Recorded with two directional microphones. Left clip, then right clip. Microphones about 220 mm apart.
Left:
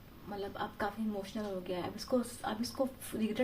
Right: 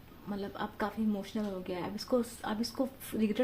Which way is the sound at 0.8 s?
40° right (ahead or behind).